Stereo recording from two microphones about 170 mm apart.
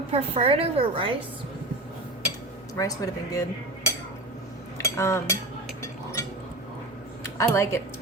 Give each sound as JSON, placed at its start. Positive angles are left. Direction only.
{"t": 0.1, "sound": "a woman's voice", "side_deg": -35}
{"t": 2.7, "sound": "speech", "side_deg": 20}
{"t": 4.8, "sound": "cutlery", "side_deg": 15}
{"t": 7.3, "sound": "speech", "side_deg": 15}